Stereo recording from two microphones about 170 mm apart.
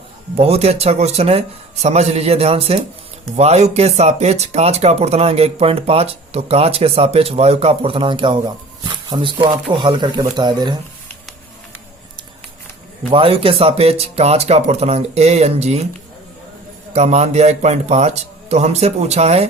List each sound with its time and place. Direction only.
0.3 s speech: 35° right (ahead or behind)
13.1 s speech: 30° right (ahead or behind)
16.9 s speech: 40° right (ahead or behind)